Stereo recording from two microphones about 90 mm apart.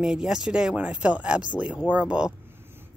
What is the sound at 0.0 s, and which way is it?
Speech, 5° right (ahead or behind).